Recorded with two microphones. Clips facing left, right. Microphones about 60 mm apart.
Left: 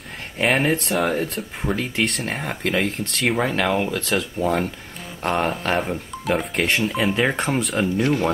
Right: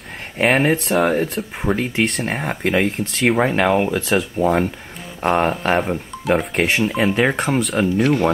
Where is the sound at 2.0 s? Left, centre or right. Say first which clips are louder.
Right 3 dB; centre.